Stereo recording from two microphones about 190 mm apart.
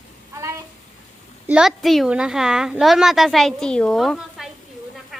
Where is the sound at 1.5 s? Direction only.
5° right (ahead or behind).